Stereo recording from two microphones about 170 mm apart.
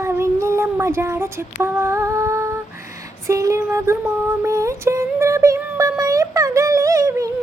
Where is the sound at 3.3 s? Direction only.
20° right (ahead or behind).